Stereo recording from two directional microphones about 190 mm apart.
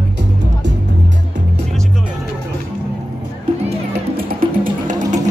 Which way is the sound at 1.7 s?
Centre (ahead or behind).